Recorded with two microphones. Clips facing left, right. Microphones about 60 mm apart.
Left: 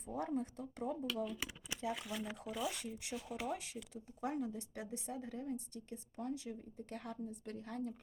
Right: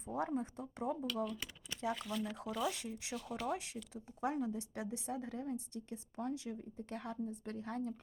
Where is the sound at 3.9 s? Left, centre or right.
Right.